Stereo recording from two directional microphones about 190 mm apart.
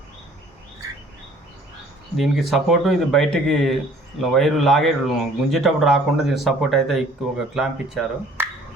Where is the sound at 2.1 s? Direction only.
Centre (ahead or behind).